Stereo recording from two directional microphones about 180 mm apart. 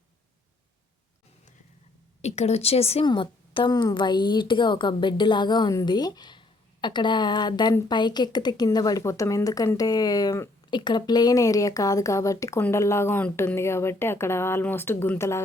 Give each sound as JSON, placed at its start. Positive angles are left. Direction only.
{"t": 2.2, "sound": "speech", "side_deg": 40}